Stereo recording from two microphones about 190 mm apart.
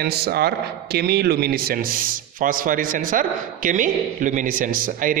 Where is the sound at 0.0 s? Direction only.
55° right (ahead or behind).